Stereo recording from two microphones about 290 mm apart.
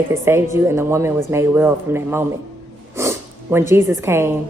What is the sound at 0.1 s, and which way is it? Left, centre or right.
Speech, centre.